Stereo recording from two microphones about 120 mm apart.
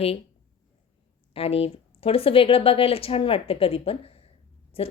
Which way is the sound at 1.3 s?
55° left (ahead or behind).